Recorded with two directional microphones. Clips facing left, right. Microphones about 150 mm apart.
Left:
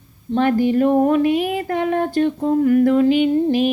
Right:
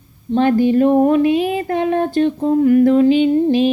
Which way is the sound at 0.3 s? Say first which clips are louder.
Right 3 dB; 25° right (ahead or behind).